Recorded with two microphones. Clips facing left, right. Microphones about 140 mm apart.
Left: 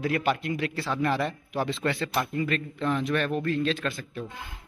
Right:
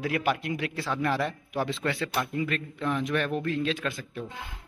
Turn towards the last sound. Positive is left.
turn(degrees=-10)  # may be behind; listen again after turning